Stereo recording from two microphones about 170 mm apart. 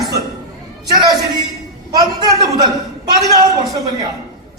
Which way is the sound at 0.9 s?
25° right (ahead or behind).